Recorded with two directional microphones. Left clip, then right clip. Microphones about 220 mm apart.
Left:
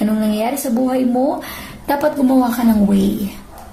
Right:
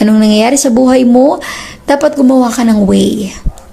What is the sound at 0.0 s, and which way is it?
Speech, 40° right (ahead or behind).